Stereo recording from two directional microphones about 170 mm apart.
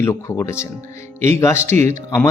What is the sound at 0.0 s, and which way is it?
Speech, 15° left (ahead or behind).